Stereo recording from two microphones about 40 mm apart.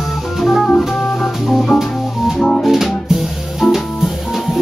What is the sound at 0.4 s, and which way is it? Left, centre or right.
Music, centre.